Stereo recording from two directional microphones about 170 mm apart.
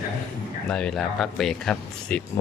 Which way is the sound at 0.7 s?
5° left (ahead or behind).